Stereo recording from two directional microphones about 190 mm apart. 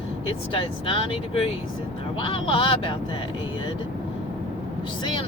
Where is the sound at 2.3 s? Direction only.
25° left (ahead or behind).